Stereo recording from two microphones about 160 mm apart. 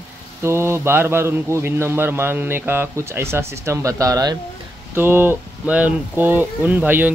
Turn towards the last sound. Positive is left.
turn(degrees=-10)  # may be behind; listen again after turning